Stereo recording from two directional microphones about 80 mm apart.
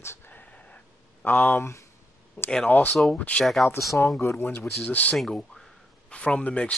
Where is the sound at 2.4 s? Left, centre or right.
Left.